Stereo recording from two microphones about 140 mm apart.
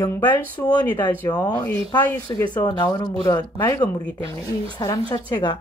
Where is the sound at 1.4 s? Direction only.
30° left (ahead or behind).